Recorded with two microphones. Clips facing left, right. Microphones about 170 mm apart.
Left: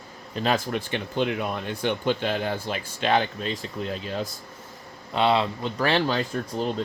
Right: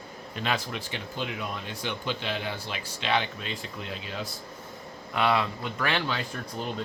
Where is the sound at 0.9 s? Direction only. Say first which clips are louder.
Left 9 dB; 60° left (ahead or behind); by 4.2 s 40° left (ahead or behind).